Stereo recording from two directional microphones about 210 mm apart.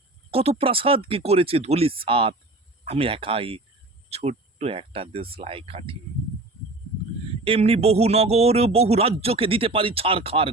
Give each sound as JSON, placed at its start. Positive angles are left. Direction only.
{"t": 0.3, "sound": "speech", "side_deg": -30}
{"t": 7.4, "sound": "speech", "side_deg": -30}